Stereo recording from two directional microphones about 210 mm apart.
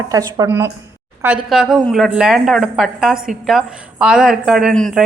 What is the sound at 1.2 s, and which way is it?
A woman's voice, 5° right (ahead or behind).